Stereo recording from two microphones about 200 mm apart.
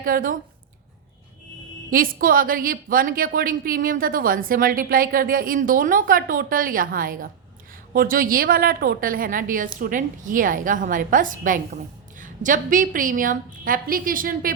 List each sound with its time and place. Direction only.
0.0 s a woman's voice: 45° right (ahead or behind)
1.9 s a woman's voice: 45° right (ahead or behind)